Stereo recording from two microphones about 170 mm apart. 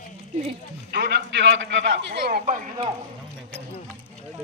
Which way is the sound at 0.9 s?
75° right (ahead or behind).